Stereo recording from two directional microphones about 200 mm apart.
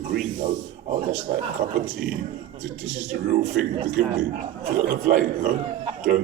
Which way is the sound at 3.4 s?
35° right (ahead or behind).